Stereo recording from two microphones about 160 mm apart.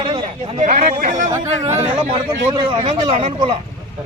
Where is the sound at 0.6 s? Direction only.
50° right (ahead or behind).